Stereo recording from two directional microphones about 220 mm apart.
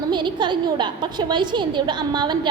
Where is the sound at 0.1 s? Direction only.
20° right (ahead or behind).